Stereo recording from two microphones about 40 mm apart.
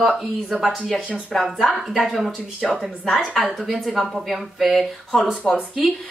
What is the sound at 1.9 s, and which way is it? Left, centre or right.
Speech, centre.